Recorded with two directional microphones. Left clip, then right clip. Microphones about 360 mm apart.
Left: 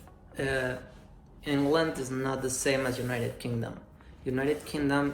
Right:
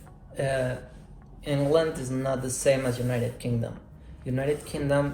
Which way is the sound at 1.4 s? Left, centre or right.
Centre.